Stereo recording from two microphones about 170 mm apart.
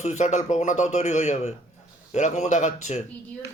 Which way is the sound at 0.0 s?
40° left (ahead or behind).